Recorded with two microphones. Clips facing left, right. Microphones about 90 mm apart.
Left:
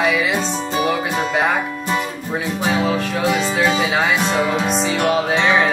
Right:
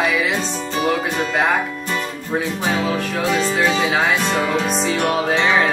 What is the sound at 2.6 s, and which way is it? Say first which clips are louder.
Music: left 2 dB; 5° left (ahead or behind).